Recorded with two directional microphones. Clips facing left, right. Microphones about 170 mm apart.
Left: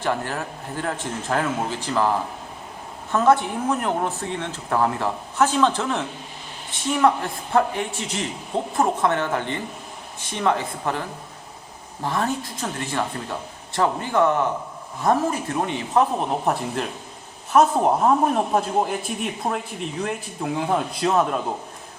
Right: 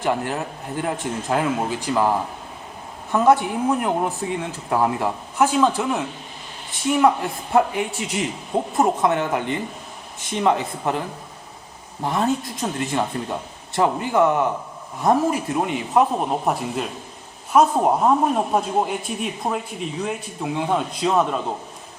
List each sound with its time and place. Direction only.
0.0 s speech: 15° right (ahead or behind)
7.0 s speech: 15° right (ahead or behind)
12.0 s speech: 20° right (ahead or behind); by 21.4 s centre (ahead or behind)